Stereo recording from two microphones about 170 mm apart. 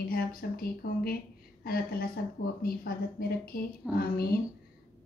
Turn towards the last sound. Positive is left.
turn(degrees=60)  # may be behind; listen again after turning